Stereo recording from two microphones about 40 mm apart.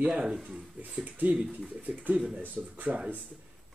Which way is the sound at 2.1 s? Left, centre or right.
Right.